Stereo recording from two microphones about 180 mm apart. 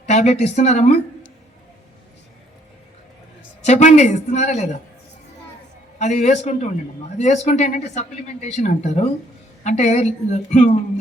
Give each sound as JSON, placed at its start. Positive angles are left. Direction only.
{"t": 0.0, "sound": "speech", "side_deg": 35}
{"t": 3.7, "sound": "speech", "side_deg": 40}
{"t": 6.0, "sound": "speech", "side_deg": 40}